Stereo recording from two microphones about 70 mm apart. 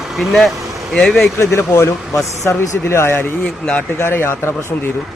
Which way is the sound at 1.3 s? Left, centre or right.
Left.